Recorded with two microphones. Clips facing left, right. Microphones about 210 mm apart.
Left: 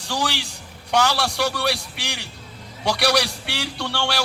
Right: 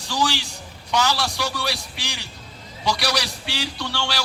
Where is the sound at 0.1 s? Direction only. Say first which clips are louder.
Right 2 dB; 60° left (ahead or behind).